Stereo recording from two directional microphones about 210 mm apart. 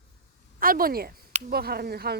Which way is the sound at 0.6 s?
45° right (ahead or behind).